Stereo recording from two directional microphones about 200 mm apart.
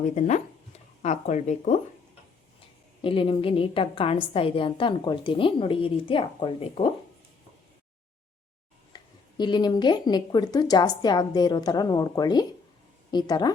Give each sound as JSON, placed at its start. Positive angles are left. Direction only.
{"t": 0.0, "sound": "speech", "side_deg": 35}
{"t": 3.0, "sound": "a woman's voice", "side_deg": 25}
{"t": 8.9, "sound": "a sound", "side_deg": 20}
{"t": 9.4, "sound": "a woman's voice", "side_deg": 20}